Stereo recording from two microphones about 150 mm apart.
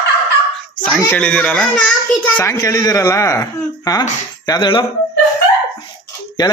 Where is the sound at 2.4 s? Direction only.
20° left (ahead or behind).